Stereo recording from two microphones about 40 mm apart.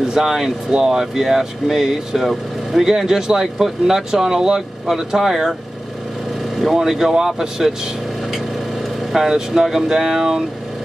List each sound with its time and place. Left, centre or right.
0.1 s speech: centre
6.6 s speech: centre
9.1 s speech: centre